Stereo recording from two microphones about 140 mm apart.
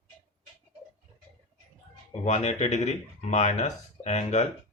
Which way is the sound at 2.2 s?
55° left (ahead or behind).